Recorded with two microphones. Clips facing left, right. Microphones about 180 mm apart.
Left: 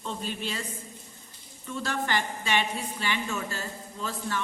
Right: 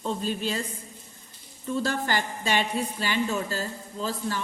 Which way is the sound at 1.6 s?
35° right (ahead or behind).